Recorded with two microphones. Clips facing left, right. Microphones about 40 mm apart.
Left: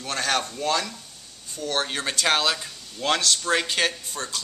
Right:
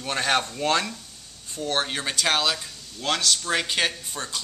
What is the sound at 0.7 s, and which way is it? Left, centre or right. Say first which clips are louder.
Speech: right 1 dB; right.